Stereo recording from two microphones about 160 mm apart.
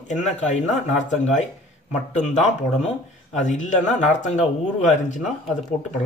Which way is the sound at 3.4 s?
50° left (ahead or behind).